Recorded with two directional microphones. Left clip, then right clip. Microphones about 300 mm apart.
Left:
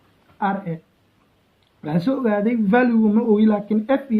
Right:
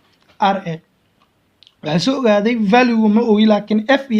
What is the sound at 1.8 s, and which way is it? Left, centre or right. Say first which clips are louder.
A man's voice: right 5 dB; right.